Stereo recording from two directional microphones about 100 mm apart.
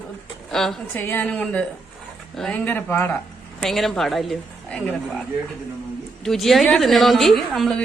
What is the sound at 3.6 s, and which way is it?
Speech, 5° left (ahead or behind).